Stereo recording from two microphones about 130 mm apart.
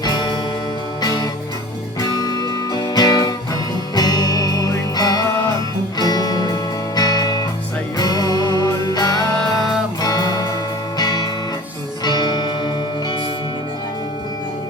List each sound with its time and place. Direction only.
0.0 s music: 35° left (ahead or behind)